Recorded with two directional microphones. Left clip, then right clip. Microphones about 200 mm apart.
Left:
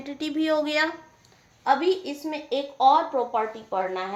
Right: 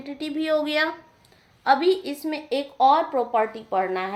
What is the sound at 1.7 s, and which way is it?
Speech, 20° right (ahead or behind).